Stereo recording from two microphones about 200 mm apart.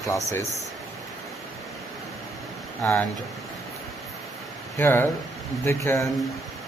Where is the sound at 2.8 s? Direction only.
10° left (ahead or behind).